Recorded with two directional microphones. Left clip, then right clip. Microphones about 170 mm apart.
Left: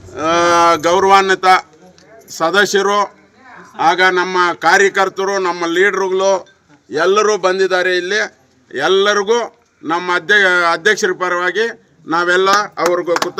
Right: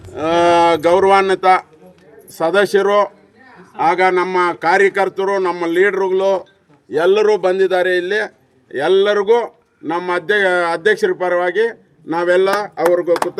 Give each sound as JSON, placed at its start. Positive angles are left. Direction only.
{"t": 0.1, "sound": "a man's voice", "side_deg": -40}